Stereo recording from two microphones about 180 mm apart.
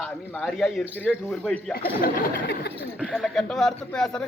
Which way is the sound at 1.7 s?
55° left (ahead or behind).